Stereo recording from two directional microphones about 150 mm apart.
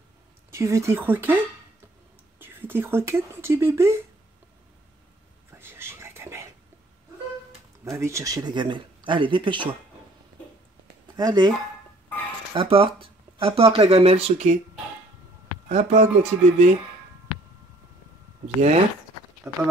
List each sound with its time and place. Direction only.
0.5 s speech: 20° right (ahead or behind)
5.5 s whispering: 15° right (ahead or behind)
8.0 s speech: 20° right (ahead or behind)
11.1 s speech: 25° right (ahead or behind)
12.5 s speech: 35° right (ahead or behind)
15.7 s speech: 50° right (ahead or behind)
19.5 s speech: 20° right (ahead or behind)